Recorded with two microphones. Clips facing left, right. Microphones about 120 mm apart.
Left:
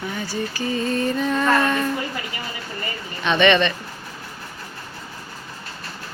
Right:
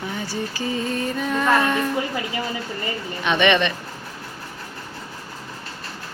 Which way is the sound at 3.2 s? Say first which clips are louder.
Left 2 dB; 15° right (ahead or behind).